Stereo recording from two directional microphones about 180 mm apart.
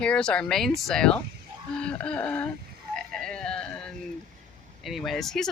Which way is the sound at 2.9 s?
5° left (ahead or behind).